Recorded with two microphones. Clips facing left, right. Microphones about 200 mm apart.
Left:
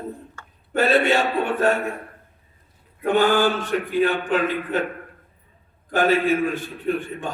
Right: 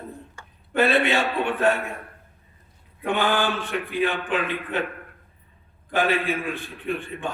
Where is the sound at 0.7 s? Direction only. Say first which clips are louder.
Left 2 dB; 45° left (ahead or behind).